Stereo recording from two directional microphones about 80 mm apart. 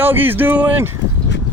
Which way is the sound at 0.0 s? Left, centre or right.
Right.